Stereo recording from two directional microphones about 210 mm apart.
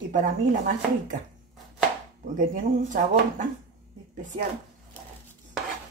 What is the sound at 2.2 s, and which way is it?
Speech, 40° right (ahead or behind).